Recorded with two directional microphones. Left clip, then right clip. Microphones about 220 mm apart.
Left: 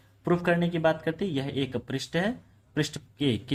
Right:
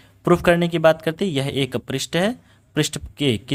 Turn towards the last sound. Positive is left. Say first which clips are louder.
# right 7 dB
turn(degrees=-35)  # may be behind; listen again after turning